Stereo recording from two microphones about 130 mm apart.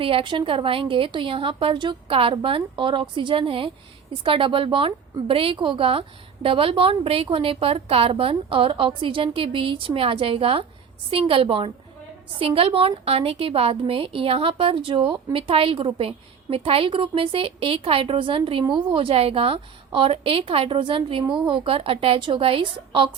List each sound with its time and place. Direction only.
0.0 s a woman's voice: 45° right (ahead or behind)